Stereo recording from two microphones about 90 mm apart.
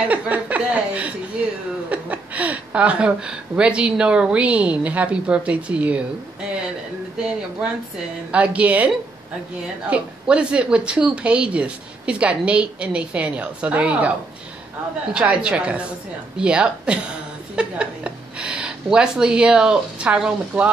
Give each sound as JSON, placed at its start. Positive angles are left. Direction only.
{"t": 0.1, "sound": "chuckle", "side_deg": -15}
{"t": 1.9, "sound": "speech", "side_deg": -15}
{"t": 8.3, "sound": "speech", "side_deg": -15}
{"t": 15.1, "sound": "speech", "side_deg": -10}